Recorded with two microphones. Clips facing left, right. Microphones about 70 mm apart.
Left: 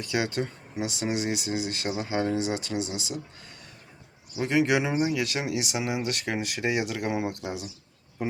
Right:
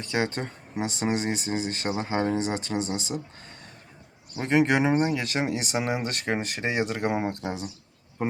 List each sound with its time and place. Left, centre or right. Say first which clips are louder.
0.0 s speech: even; right
4.4 s speech: right 2 dB; right